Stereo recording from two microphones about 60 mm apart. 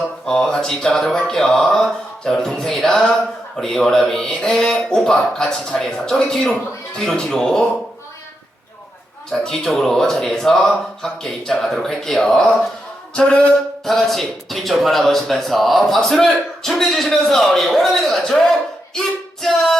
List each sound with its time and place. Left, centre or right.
0.3 s speech: centre
9.3 s speech: centre
13.1 s a sound: centre
13.8 s speech: centre
18.9 s music: centre